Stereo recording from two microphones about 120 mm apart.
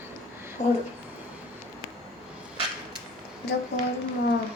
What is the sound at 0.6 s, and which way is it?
Speech, 65° left (ahead or behind).